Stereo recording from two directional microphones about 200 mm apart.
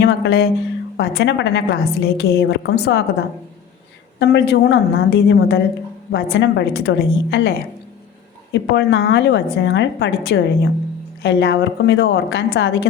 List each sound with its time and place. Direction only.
0.0 s a woman's voice: 55° left (ahead or behind)
8.5 s a woman's voice: 60° left (ahead or behind)